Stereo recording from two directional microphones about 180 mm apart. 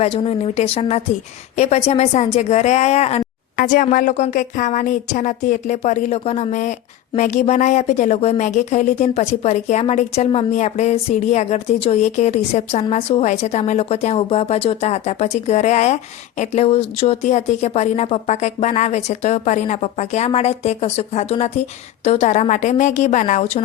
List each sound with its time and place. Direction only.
0.0 s a woman's voice: 35° left (ahead or behind)
3.6 s a woman's voice: 50° left (ahead or behind)